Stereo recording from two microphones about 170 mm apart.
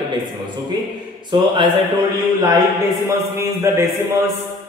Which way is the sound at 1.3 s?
25° right (ahead or behind).